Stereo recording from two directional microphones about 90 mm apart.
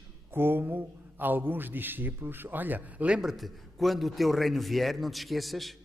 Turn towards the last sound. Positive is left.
turn(degrees=0)  # may be behind; listen again after turning